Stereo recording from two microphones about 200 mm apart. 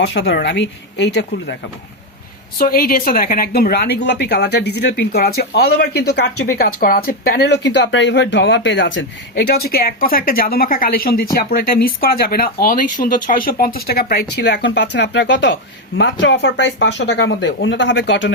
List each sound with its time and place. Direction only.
0.0 s speech: 60° left (ahead or behind)
2.6 s speech: 50° left (ahead or behind); by 9.0 s 70° left (ahead or behind)
9.3 s speech: 50° left (ahead or behind)